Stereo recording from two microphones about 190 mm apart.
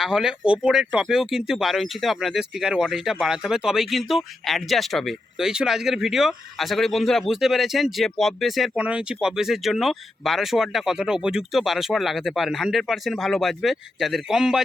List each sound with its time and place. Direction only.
0.0 s speech: centre (ahead or behind)